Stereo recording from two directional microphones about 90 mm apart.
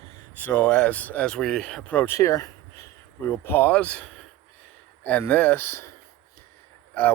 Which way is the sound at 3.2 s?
25° left (ahead or behind).